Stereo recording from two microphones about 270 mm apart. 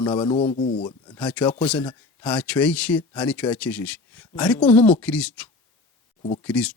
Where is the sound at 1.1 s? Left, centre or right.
Centre.